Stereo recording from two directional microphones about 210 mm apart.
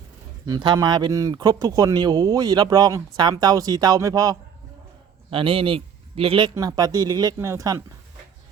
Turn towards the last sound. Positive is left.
turn(degrees=-15)  # may be behind; listen again after turning